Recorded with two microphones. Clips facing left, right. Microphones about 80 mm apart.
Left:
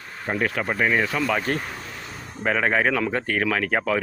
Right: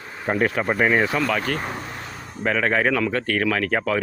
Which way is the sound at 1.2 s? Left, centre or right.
Centre.